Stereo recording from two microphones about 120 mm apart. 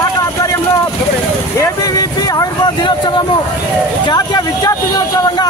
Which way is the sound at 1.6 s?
30° left (ahead or behind).